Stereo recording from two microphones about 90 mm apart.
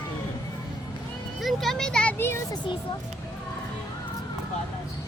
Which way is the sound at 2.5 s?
65° left (ahead or behind).